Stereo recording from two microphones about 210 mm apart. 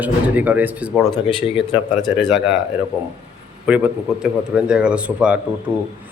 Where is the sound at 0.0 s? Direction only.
10° right (ahead or behind).